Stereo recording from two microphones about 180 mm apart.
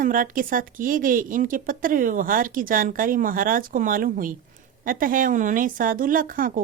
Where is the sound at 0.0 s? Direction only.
50° right (ahead or behind).